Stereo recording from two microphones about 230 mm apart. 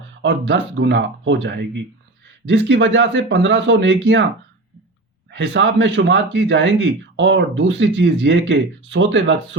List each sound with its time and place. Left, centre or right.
0.2 s speech: right
5.3 s speech: right